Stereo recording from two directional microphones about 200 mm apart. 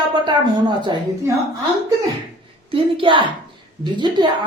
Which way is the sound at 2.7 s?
25° right (ahead or behind).